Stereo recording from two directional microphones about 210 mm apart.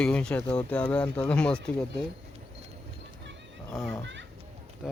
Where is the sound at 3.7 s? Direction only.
Centre (ahead or behind).